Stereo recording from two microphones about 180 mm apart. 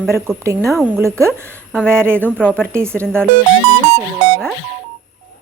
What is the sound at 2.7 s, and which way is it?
Speech, 15° right (ahead or behind).